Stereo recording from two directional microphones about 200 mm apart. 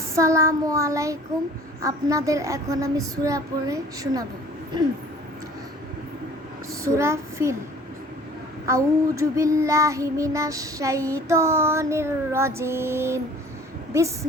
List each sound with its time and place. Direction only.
0.2 s child singing: 15° right (ahead or behind)
6.8 s child singing: 15° right (ahead or behind)
8.6 s child singing: 15° right (ahead or behind)